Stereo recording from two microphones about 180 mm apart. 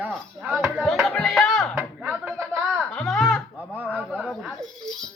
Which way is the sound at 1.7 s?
10° right (ahead or behind).